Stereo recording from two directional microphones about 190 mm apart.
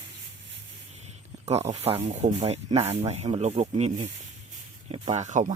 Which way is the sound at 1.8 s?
30° right (ahead or behind).